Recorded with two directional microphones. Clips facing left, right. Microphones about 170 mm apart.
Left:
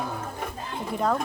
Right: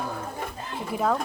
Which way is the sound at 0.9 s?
5° right (ahead or behind).